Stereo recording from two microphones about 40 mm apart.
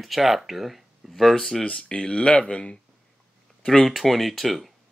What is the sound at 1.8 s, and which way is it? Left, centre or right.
Speech, left.